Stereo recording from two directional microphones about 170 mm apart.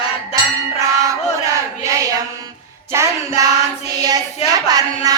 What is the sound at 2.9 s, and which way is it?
Music, 15° right (ahead or behind).